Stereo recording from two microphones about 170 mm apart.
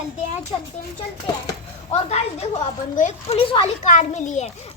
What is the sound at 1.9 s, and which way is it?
A child's voice, 40° left (ahead or behind).